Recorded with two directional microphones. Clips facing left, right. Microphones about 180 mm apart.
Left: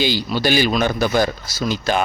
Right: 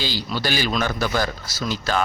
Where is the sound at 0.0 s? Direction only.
15° left (ahead or behind).